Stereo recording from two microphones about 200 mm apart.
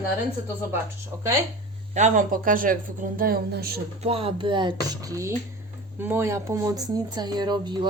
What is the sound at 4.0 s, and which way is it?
Speech, 30° right (ahead or behind).